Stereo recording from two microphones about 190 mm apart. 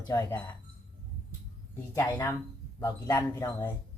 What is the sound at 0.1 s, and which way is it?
Speech, 15° left (ahead or behind).